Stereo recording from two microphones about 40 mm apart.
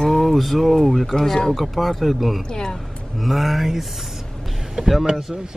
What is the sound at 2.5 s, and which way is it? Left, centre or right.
Speech, centre.